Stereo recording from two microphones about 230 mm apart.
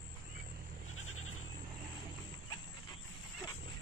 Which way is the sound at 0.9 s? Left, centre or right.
Left.